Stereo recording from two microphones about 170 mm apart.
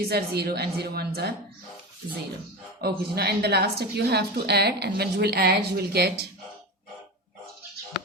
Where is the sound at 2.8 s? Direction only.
70° right (ahead or behind).